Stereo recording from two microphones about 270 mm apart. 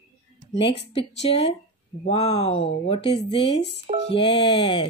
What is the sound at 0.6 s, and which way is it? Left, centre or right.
Speech, centre.